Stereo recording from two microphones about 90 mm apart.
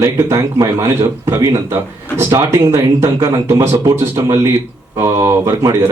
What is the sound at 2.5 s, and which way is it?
A man's voice, 35° right (ahead or behind).